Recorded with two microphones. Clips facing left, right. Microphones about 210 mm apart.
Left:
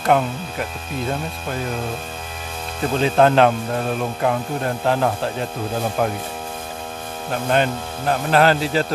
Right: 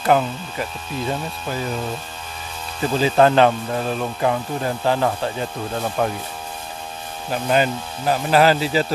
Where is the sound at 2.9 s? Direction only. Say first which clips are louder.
Even; centre (ahead or behind).